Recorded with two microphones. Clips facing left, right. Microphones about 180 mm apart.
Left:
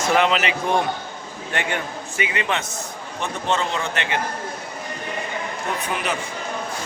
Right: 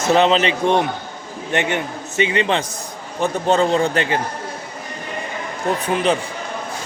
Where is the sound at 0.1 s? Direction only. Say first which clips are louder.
Right 5 dB; 25° right (ahead or behind).